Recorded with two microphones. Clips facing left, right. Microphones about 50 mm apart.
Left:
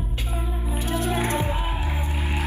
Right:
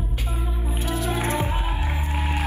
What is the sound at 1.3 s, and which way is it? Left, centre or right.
Music, right.